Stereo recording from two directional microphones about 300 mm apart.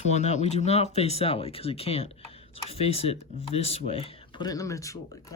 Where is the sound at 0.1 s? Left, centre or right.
Left.